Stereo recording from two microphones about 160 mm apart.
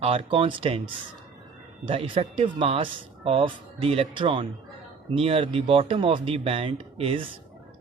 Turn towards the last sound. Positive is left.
turn(degrees=-35)  # may be behind; listen again after turning